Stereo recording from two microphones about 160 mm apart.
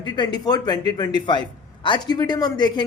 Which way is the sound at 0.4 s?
25° left (ahead or behind).